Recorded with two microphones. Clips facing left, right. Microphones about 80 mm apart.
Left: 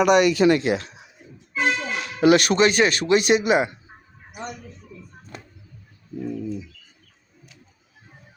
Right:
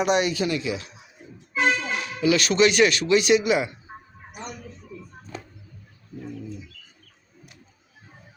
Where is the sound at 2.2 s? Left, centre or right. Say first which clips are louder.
Left 3 dB; left.